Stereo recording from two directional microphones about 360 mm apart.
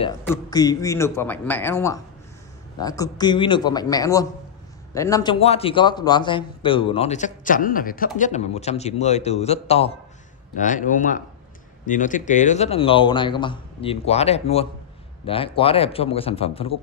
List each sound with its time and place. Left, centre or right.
0.5 s a man's voice: centre